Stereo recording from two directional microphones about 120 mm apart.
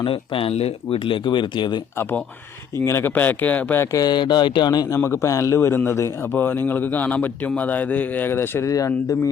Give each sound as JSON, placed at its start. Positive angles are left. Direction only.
{"t": 0.0, "sound": "speech", "side_deg": 45}
{"t": 2.0, "sound": "a man's voice", "side_deg": 15}
{"t": 3.9, "sound": "speech", "side_deg": 35}
{"t": 4.9, "sound": "a man's voice", "side_deg": 20}